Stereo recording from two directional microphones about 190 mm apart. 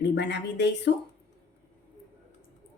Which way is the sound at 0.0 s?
65° left (ahead or behind).